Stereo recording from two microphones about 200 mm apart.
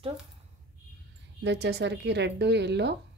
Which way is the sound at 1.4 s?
60° right (ahead or behind).